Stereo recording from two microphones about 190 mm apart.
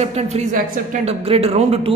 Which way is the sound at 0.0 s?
35° right (ahead or behind).